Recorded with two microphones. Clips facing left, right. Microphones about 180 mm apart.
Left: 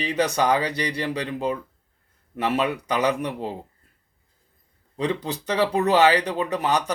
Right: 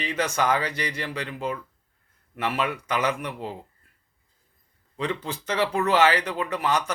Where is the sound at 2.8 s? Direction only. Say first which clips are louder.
Left 3 dB; 35° left (ahead or behind).